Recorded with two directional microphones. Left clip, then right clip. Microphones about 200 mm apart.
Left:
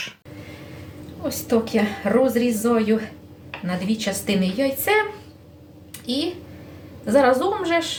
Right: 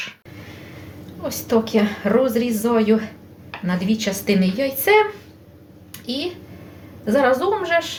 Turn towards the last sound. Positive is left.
turn(degrees=-15)  # may be behind; listen again after turning